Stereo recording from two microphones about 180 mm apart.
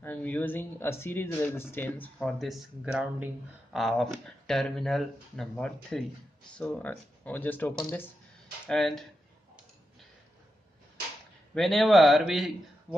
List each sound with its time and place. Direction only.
0.0 s speech: 10° left (ahead or behind)
11.5 s speech: centre (ahead or behind)